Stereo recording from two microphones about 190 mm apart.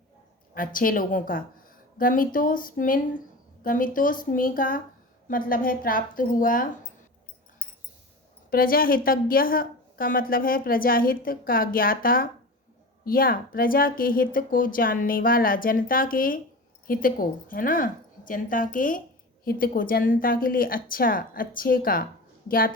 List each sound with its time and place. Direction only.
0.5 s a woman's voice: 45° left (ahead or behind)
8.4 s a woman's voice: 50° left (ahead or behind)